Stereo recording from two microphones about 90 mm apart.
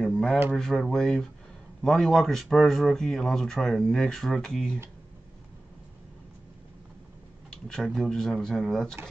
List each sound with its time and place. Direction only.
0.0 s a sound: 10° left (ahead or behind)
0.5 s speech: 5° left (ahead or behind)
7.6 s speech: 5° left (ahead or behind)